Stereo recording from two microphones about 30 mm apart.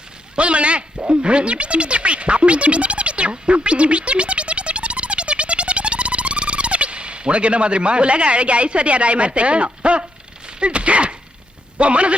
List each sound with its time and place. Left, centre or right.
0.3 s a man's voice: right
0.9 s speech: right
1.2 s a man's voice: right